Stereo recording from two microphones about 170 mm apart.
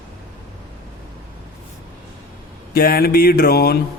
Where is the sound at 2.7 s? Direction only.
60° left (ahead or behind).